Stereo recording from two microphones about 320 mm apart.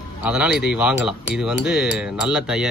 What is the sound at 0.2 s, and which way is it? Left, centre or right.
Speech, centre.